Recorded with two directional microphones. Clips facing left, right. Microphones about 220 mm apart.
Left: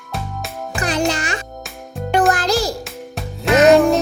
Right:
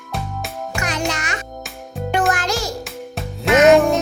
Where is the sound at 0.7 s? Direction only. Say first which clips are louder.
Left 5 dB; 35° left (ahead or behind).